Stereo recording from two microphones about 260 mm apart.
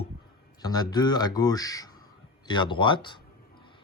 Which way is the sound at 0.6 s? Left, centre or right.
Centre.